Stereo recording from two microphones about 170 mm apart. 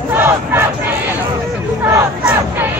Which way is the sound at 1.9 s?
15° right (ahead or behind).